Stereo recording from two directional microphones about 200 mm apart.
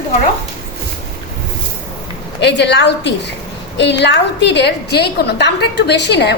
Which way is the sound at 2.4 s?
60° left (ahead or behind).